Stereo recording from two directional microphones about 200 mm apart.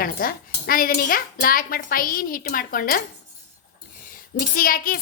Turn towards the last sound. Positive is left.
turn(degrees=45)  # may be behind; listen again after turning